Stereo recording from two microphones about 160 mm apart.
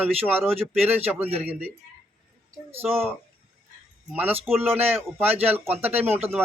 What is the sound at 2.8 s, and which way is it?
Speech, 5° right (ahead or behind).